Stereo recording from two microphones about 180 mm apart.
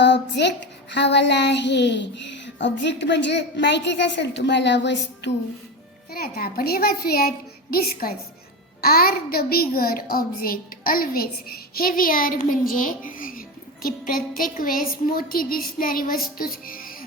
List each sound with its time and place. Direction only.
0.0 s a child's voice: 70° left (ahead or behind)
6.1 s a woman's voice: 60° left (ahead or behind)